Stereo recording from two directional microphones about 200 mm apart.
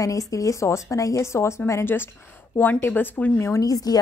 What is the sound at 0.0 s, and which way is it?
A woman's voice, 15° left (ahead or behind).